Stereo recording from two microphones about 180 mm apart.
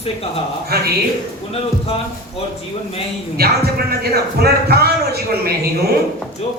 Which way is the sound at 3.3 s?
60° right (ahead or behind).